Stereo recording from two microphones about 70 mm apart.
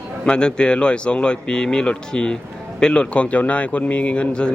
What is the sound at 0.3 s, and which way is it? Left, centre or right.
A man's voice, centre.